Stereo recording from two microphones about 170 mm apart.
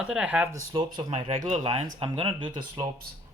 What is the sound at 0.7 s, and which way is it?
Speech, 35° right (ahead or behind).